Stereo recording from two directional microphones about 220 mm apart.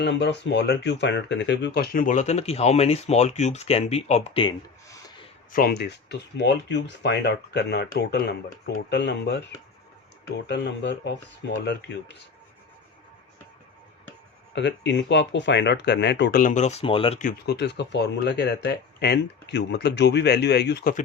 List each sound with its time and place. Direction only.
0.0 s speech: 50° left (ahead or behind); by 4.9 s 20° left (ahead or behind)
5.5 s speech: 45° left (ahead or behind)
10.5 s speech: 50° left (ahead or behind)
14.5 s speech: 55° left (ahead or behind); by 17.2 s 25° left (ahead or behind)
17.2 s speech: 40° left (ahead or behind)